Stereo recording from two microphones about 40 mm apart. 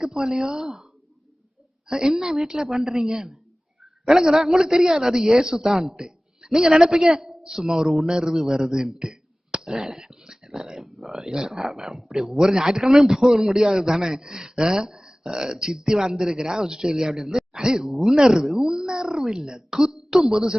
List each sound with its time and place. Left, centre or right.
0.0 s a man's voice: centre
1.9 s a man's voice: centre
3.1 s a man's voice: centre
11.6 s a man's voice: centre
17.1 s speech: centre
17.3 s a man's voice: centre
20.1 s speech: centre